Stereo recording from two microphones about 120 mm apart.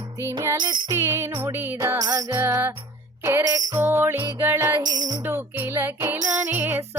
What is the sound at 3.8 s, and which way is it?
Music, 20° right (ahead or behind).